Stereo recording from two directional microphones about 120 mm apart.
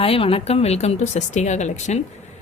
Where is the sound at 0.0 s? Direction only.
55° left (ahead or behind); by 2.0 s 75° left (ahead or behind).